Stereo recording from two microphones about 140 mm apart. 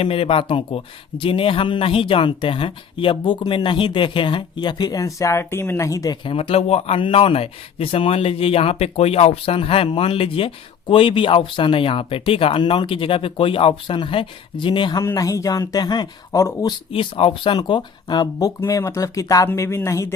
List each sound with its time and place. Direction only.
0.0 s speech: 40° left (ahead or behind); by 6.1 s 25° left (ahead or behind)
6.2 s speech: 40° left (ahead or behind)
15.0 s speech: 25° left (ahead or behind)
16.9 s speech: 40° left (ahead or behind); by 20.1 s 20° left (ahead or behind)